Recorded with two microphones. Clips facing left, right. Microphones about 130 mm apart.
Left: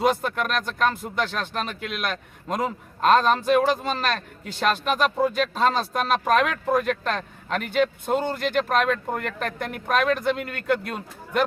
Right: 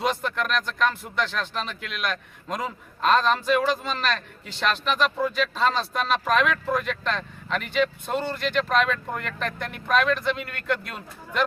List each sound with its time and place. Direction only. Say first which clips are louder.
0.0 s speech: left 3 dB; 50° left (ahead or behind)